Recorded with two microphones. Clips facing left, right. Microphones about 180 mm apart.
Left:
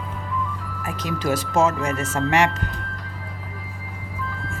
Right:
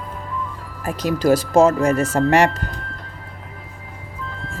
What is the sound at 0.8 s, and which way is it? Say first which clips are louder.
Speech: right 7 dB; 35° right (ahead or behind).